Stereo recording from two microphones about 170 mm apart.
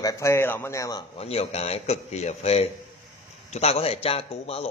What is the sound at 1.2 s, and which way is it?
A man's voice, 35° left (ahead or behind).